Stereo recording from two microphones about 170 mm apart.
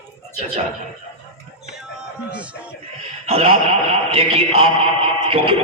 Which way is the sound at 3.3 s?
35° right (ahead or behind).